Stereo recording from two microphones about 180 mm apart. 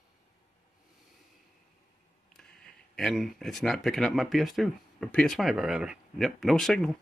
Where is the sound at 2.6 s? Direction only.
Centre (ahead or behind).